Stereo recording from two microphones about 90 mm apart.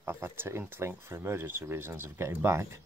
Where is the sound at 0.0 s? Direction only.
25° right (ahead or behind).